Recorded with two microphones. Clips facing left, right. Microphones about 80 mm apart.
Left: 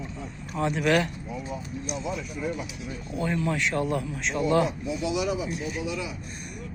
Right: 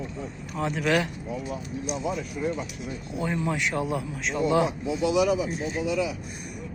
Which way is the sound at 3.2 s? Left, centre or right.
Centre.